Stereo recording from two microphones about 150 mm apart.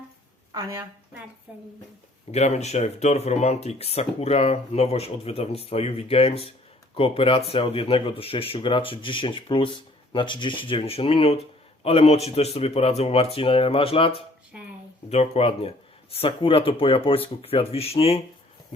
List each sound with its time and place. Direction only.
0.5 s a woman's voice: 25° right (ahead or behind)
1.5 s speech: 10° right (ahead or behind)
2.3 s speech: 45° left (ahead or behind)